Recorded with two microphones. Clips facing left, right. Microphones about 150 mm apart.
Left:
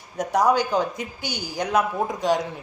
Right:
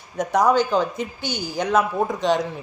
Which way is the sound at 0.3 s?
15° left (ahead or behind).